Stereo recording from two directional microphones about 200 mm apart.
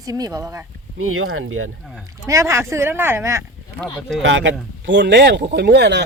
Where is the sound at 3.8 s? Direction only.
Centre (ahead or behind).